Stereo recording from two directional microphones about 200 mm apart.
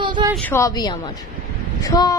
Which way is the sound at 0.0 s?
20° right (ahead or behind).